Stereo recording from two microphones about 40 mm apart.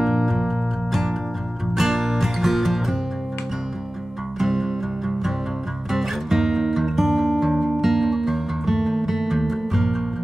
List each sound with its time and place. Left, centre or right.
0.0 s music: centre
4.4 s music: centre